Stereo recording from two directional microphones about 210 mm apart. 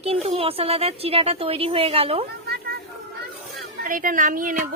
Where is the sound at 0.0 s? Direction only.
30° right (ahead or behind).